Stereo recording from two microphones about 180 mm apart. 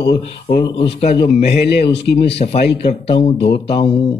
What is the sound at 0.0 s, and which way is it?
A man's voice, 30° left (ahead or behind).